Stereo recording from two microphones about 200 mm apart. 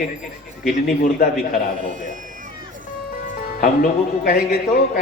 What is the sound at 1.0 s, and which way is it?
Speech, 40° left (ahead or behind).